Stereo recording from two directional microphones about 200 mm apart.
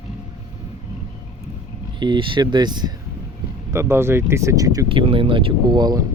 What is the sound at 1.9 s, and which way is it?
Speech, 25° right (ahead or behind).